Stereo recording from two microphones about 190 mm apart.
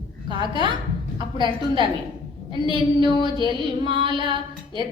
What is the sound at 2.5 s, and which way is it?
Speech, 25° right (ahead or behind).